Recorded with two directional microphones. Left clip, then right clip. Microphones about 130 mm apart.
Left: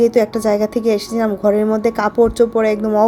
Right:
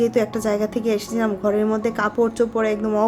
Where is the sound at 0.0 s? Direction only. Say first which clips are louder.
Left 6 dB; 25° left (ahead or behind).